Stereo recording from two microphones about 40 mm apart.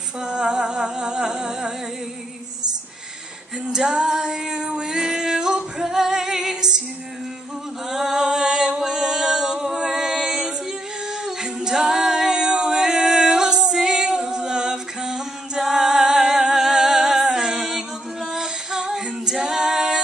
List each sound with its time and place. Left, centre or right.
0.2 s humming: right
3.7 s female singing: right
7.9 s a capella: centre
9.8 s music: centre
11.4 s a capella: centre
17.6 s music: centre
18.9 s female singing: centre